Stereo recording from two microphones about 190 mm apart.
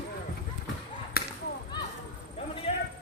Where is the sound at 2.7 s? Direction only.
30° left (ahead or behind).